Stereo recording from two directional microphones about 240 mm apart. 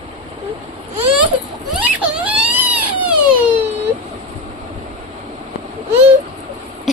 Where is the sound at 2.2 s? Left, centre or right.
Centre.